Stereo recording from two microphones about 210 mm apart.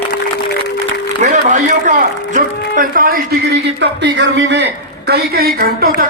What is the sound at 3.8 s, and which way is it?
A man's voice, 55° right (ahead or behind).